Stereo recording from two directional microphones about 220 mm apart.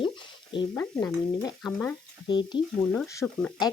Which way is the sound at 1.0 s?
15° left (ahead or behind).